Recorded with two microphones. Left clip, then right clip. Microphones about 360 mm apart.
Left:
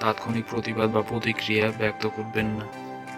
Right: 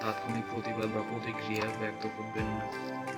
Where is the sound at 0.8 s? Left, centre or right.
Left.